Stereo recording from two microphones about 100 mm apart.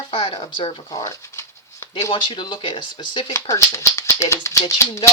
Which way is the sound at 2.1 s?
55° left (ahead or behind).